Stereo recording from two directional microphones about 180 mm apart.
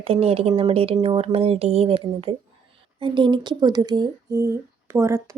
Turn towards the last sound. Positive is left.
turn(degrees=-15)  # may be behind; listen again after turning